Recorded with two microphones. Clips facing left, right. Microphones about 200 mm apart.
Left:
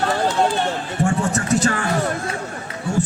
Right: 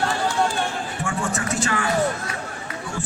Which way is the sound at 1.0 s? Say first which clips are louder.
Left 7 dB; 40° left (ahead or behind).